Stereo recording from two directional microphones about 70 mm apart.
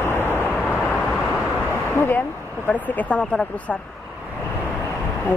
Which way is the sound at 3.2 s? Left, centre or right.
Centre.